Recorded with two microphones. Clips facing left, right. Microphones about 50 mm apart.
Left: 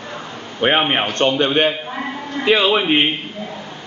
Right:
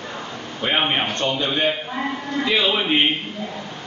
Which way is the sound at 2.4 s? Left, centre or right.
Left.